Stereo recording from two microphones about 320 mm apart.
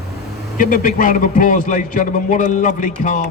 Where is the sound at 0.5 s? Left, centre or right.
Left.